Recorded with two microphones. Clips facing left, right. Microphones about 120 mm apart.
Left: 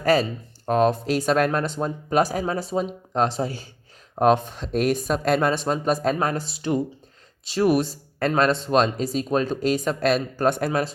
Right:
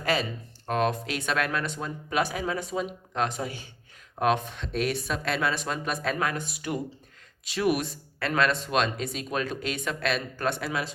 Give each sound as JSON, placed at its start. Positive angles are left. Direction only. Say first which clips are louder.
{"t": 0.0, "sound": "speech", "louder": "left 8 dB", "side_deg": 40}